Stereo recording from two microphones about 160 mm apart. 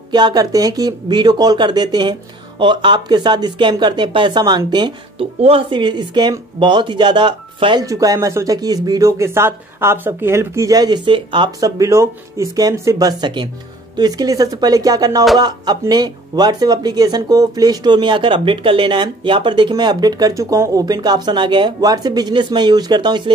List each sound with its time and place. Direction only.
0.1 s speech: 25° right (ahead or behind)